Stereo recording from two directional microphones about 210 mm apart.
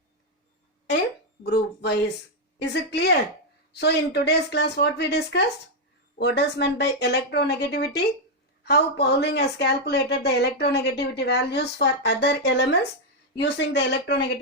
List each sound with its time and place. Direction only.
1.5 s speech: 55° left (ahead or behind)